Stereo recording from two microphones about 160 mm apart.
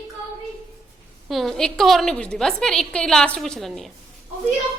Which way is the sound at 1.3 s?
Centre (ahead or behind).